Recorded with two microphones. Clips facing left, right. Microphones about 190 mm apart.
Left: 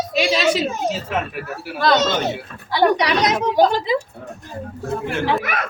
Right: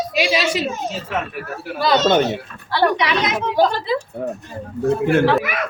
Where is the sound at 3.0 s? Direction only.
40° left (ahead or behind).